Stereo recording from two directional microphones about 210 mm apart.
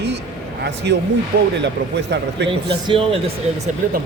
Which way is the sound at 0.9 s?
55° right (ahead or behind).